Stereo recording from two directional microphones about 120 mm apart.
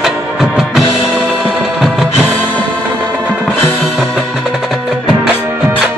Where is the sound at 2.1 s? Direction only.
15° left (ahead or behind).